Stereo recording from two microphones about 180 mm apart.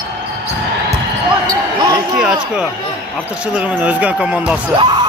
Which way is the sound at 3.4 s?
5° right (ahead or behind).